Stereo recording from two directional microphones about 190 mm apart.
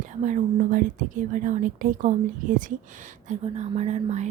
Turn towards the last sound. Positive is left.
turn(degrees=-35)  # may be behind; listen again after turning